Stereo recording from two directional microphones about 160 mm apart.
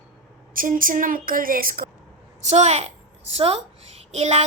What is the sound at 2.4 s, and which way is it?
A woman's voice, 45° right (ahead or behind).